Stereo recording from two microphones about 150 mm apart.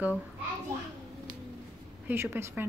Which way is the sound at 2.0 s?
15° right (ahead or behind).